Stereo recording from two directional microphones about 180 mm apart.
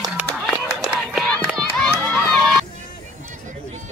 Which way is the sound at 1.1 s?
5° left (ahead or behind).